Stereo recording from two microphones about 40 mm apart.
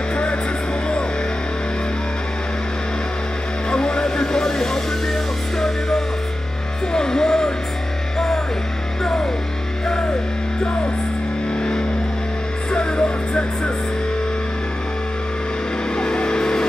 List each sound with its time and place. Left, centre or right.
0.1 s music: left
3.7 s vehicle: centre
5.6 s music: centre
9.0 s music: centre
12.7 s music: left
16.0 s music: left